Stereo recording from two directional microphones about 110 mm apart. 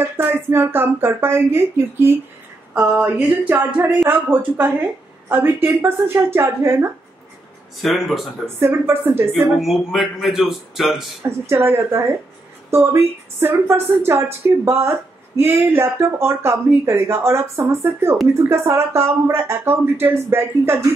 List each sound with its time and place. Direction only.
0.0 s a woman's voice: 20° right (ahead or behind)
2.7 s a sound: 20° right (ahead or behind)
5.3 s speech: 20° right (ahead or behind)
7.8 s a man's voice: centre (ahead or behind)
8.5 s speech: 20° right (ahead or behind)
9.6 s a man's voice: centre (ahead or behind)
11.2 s speech: 25° right (ahead or behind)